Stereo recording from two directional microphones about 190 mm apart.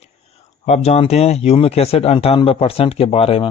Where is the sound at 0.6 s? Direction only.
35° left (ahead or behind).